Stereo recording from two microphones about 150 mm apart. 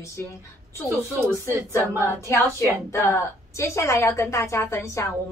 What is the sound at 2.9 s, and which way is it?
A woman's voice, 15° left (ahead or behind).